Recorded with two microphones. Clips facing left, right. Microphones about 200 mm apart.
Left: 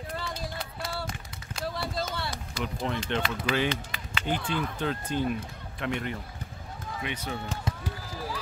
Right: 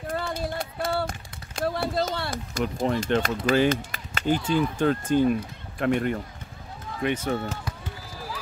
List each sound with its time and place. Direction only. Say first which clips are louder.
0.0 s a sound: right 6 dB; 50° right (ahead or behind)
5.8 s speech: right 8 dB; 45° right (ahead or behind)
7.7 s run: left 2 dB; 25° left (ahead or behind)